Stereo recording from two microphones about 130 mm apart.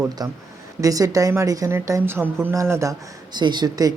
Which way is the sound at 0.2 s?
30° right (ahead or behind).